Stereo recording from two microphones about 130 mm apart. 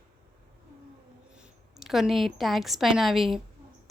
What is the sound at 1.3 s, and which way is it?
A woman's voice, 5° right (ahead or behind).